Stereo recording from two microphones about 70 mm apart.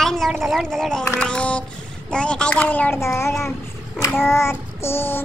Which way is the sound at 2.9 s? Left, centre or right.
Left.